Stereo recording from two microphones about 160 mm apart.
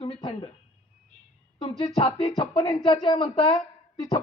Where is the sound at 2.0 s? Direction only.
35° left (ahead or behind).